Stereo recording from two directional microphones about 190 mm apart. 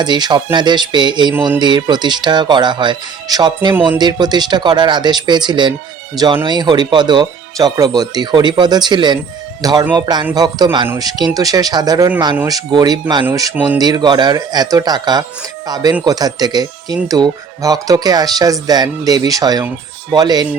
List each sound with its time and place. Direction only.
0.0 s speech: 20° right (ahead or behind)